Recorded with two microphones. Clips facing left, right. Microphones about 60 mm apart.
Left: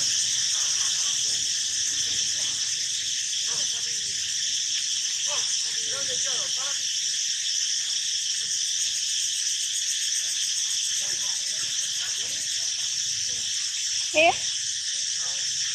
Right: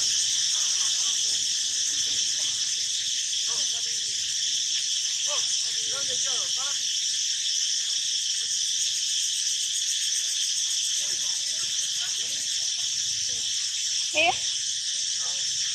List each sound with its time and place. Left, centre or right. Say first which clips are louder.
14.2 s speech: left 4 dB; left